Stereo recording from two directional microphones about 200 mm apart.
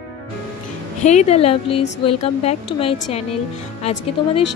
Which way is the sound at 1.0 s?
35° left (ahead or behind).